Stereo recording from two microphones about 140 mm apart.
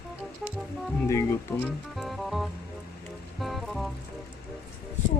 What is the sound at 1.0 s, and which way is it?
Speech, 20° left (ahead or behind).